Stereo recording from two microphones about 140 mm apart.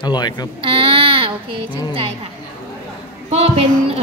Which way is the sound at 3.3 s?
50° right (ahead or behind).